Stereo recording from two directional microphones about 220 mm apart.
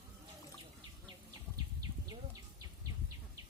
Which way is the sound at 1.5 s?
15° right (ahead or behind).